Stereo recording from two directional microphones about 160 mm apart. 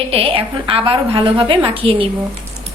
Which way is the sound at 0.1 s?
35° right (ahead or behind).